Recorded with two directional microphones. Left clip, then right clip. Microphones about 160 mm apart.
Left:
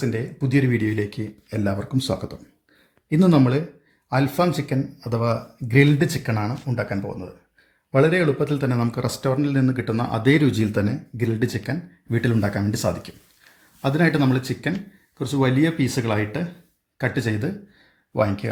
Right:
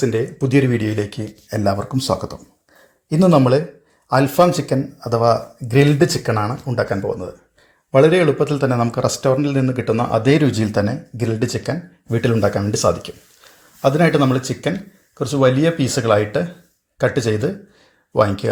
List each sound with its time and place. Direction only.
0.0 s speech: 20° right (ahead or behind)
3.1 s speech: 5° right (ahead or behind)
6.7 s speech: 15° right (ahead or behind)